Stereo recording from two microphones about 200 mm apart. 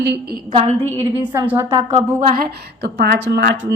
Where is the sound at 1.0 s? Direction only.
10° right (ahead or behind).